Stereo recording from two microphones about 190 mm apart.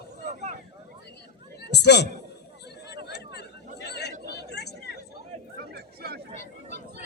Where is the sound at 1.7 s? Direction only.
60° left (ahead or behind).